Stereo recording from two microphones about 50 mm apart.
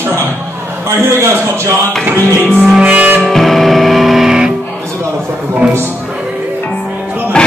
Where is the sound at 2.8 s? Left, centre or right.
Right.